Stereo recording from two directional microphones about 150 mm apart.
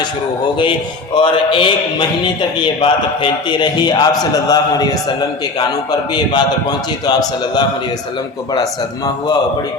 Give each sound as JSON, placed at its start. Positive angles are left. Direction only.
{"t": 1.2, "sound": "a man's voice", "side_deg": 35}